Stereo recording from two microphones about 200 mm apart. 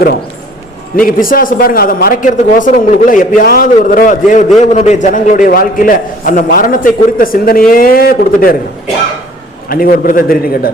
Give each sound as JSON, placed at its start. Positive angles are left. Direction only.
{"t": 0.9, "sound": "a man's voice", "side_deg": 45}
{"t": 9.6, "sound": "a man's voice", "side_deg": 45}